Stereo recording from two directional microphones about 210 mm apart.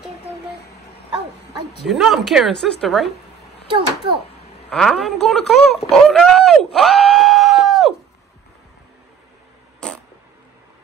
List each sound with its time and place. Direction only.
1.9 s speech: centre (ahead or behind)
3.6 s a child's voice: 25° right (ahead or behind)
4.6 s speech: centre (ahead or behind)
9.8 s a sound: 5° left (ahead or behind)